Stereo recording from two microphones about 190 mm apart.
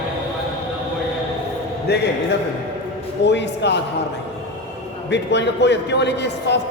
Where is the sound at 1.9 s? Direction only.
60° left (ahead or behind).